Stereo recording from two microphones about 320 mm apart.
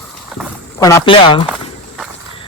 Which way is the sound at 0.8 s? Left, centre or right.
Centre.